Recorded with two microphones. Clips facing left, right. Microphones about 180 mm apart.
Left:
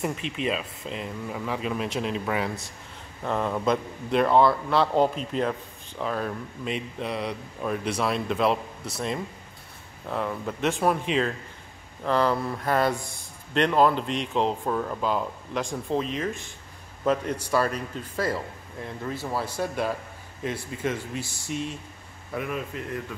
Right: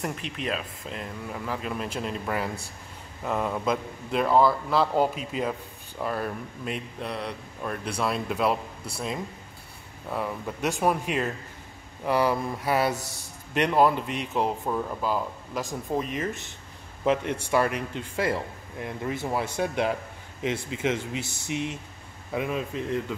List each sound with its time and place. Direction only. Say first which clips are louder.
0.0 s a man's voice: left 3 dB; centre (ahead or behind)
17.5 s speech: right 1 dB; 15° right (ahead or behind)
20.4 s a man's voice: right 2 dB; 90° right
21.2 s speech: right 1 dB; 20° right (ahead or behind)